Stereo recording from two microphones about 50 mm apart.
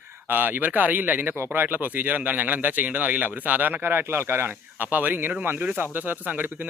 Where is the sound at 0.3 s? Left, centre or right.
Right.